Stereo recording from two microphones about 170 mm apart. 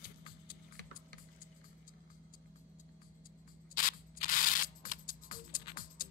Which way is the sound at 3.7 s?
55° left (ahead or behind).